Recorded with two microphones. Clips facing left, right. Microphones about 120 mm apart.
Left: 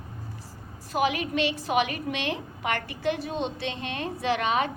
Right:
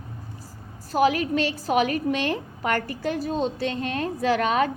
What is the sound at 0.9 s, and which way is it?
A woman's voice, 40° right (ahead or behind).